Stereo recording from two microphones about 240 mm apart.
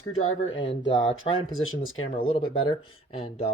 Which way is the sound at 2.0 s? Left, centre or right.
Left.